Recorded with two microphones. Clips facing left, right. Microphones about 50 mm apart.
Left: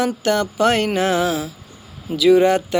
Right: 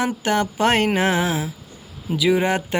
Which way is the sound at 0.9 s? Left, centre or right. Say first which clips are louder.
Left 1 dB; right.